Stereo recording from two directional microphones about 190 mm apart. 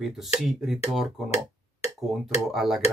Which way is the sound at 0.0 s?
Centre (ahead or behind).